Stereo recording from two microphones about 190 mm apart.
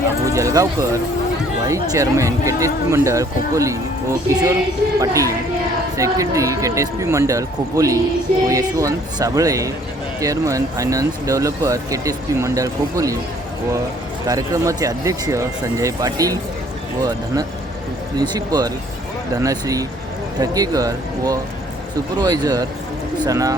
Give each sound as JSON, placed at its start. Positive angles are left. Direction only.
{"t": 0.3, "sound": "speech", "side_deg": -15}
{"t": 14.3, "sound": "speech", "side_deg": -15}